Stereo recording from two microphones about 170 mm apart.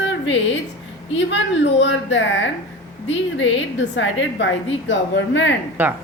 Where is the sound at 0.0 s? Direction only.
90° left.